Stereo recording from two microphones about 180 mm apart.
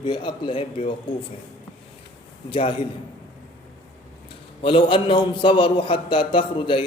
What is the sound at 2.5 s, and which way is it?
Speech, 30° left (ahead or behind).